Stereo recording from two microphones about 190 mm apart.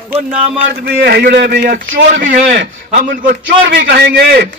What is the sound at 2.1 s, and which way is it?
Speech, 45° right (ahead or behind).